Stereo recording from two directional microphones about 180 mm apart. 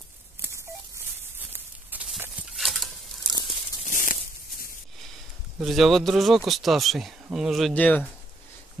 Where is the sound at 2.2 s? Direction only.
5° right (ahead or behind).